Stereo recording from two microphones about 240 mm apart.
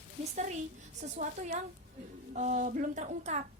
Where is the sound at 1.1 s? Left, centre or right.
Right.